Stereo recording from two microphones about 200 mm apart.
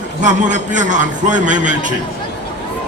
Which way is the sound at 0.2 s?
40° right (ahead or behind).